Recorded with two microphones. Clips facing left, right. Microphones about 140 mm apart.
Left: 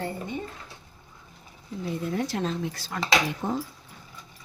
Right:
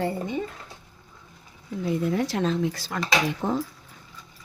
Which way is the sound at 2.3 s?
90° right.